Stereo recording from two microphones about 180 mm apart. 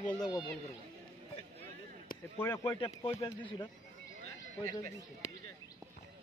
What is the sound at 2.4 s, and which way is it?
Speech, 15° left (ahead or behind).